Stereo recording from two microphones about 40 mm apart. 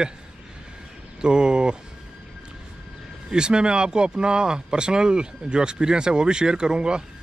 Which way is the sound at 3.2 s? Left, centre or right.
Right.